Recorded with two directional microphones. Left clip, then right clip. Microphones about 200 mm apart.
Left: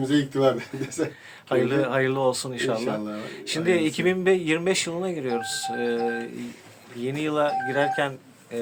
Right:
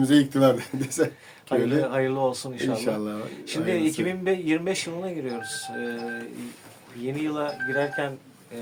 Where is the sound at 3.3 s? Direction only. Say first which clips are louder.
Left 4 dB; 40° left (ahead or behind).